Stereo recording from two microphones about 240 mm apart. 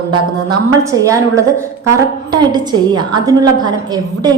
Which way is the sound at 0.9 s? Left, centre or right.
Centre.